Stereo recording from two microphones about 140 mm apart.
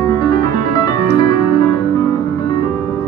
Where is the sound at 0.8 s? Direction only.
30° left (ahead or behind).